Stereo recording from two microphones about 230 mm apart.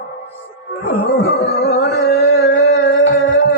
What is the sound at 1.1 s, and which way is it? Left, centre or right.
Music, left.